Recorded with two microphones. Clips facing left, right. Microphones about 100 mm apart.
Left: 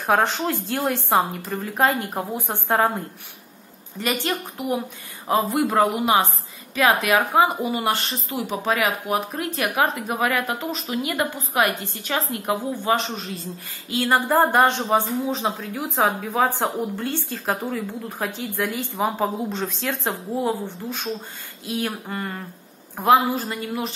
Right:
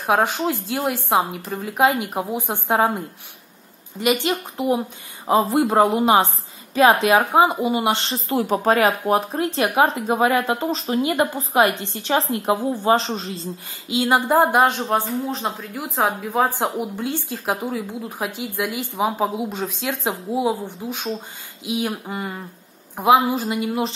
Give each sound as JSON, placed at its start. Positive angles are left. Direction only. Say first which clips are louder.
{"t": 0.0, "sound": "speech", "louder": "right 1 dB", "side_deg": -5}
{"t": 4.0, "sound": "speech", "louder": "right 4 dB", "side_deg": -15}
{"t": 8.3, "sound": "speech", "louder": "right 6 dB", "side_deg": -45}